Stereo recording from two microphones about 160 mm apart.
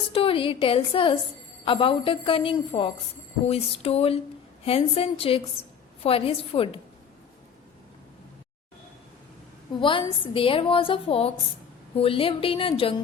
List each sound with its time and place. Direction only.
0.1 s a woman's voice: 35° left (ahead or behind)
9.8 s a woman's voice: 30° left (ahead or behind)